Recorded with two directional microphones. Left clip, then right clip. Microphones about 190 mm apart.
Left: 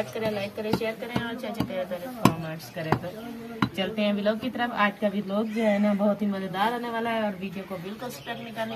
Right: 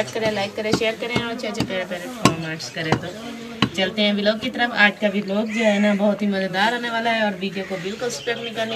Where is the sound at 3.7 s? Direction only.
50° left (ahead or behind).